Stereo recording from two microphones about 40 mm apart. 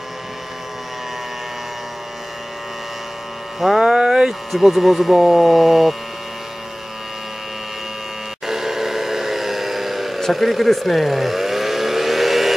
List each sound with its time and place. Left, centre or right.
3.5 s speech: centre
3.8 s speech: centre
4.5 s speech: centre
8.5 s a sound: centre
10.3 s vehicle: centre